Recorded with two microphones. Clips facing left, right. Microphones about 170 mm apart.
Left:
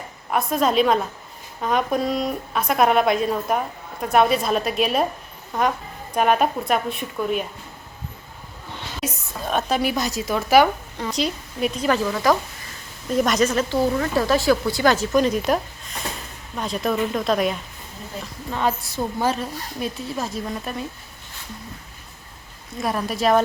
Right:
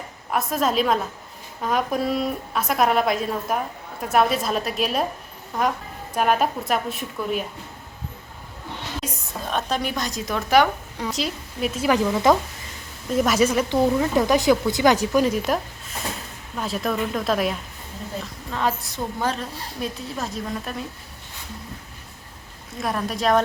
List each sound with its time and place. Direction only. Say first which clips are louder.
0.3 s speech: left 2 dB; centre (ahead or behind)
9.0 s speech: left 5 dB; 5° left (ahead or behind)
10.9 s speech: left 2 dB; 5° right (ahead or behind)
11.9 s speech: right 2 dB; 20° right (ahead or behind)
13.1 s speech: even; 5° right (ahead or behind)
22.8 s speech: left 2 dB; centre (ahead or behind)